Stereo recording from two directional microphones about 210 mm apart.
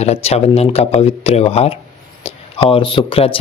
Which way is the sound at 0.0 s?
30° left (ahead or behind).